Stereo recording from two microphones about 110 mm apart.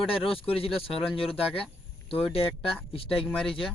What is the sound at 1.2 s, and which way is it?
Speech, 55° left (ahead or behind).